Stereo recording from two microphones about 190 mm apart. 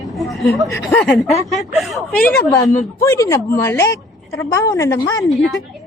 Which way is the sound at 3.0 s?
15° left (ahead or behind).